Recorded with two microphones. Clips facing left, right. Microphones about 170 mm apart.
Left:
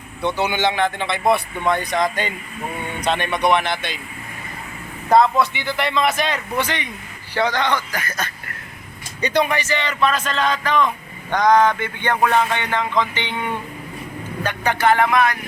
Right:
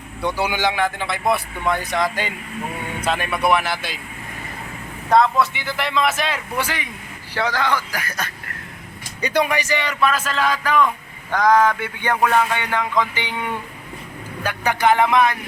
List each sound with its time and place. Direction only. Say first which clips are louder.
0.2 s a man's voice: left 1 dB; 10° right (ahead or behind)
5.0 s a man's voice: left 1 dB; centre (ahead or behind)
14.4 s speech: even; 10° right (ahead or behind)